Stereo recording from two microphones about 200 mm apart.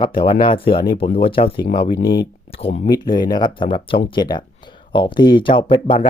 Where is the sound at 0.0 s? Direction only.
25° left (ahead or behind).